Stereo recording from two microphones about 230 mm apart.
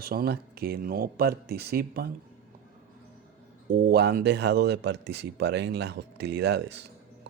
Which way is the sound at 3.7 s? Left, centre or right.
Right.